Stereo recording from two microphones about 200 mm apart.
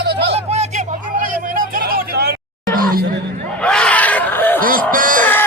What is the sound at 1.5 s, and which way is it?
Hubbub, 45° right (ahead or behind).